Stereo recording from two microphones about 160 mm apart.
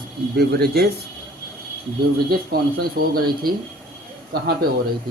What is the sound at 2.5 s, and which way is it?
Speech, 70° right (ahead or behind).